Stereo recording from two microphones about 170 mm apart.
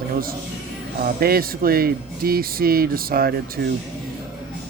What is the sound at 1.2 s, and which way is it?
Speech, 60° right (ahead or behind).